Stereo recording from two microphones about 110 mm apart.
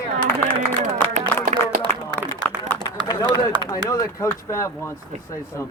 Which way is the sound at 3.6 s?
30° left (ahead or behind).